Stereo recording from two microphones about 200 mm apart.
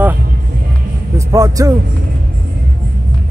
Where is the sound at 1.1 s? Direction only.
15° right (ahead or behind).